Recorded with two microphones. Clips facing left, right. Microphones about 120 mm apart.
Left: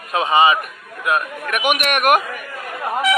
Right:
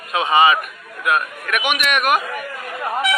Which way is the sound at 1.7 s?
50° left (ahead or behind).